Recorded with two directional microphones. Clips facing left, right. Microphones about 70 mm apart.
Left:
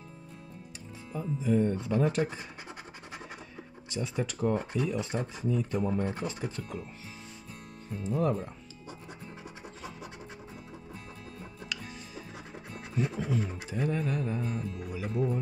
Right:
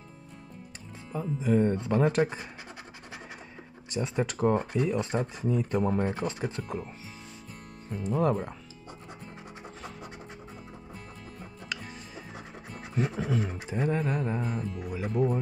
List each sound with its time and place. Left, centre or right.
1.4 s music: right
3.9 s music: right
7.9 s speech: right
12.9 s music: right